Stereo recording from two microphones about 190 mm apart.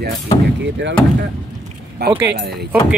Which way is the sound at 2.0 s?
55° right (ahead or behind).